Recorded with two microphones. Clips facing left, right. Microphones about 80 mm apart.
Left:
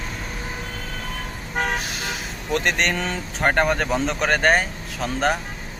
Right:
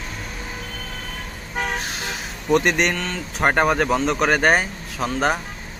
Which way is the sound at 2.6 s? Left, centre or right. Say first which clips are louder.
Right 2 dB; centre.